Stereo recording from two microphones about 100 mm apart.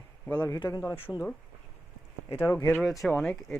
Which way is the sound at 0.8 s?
20° left (ahead or behind).